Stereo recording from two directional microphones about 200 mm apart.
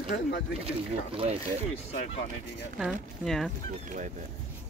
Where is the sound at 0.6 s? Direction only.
30° right (ahead or behind).